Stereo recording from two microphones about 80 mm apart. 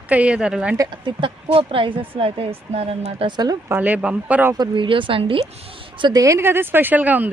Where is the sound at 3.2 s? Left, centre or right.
Right.